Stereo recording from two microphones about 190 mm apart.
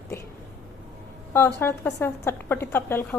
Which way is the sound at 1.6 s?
15° left (ahead or behind).